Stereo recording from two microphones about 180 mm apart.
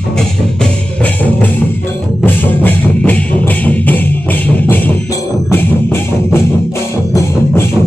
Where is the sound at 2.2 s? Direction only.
10° left (ahead or behind).